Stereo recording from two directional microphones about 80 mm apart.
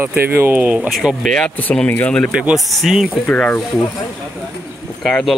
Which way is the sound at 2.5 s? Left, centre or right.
Centre.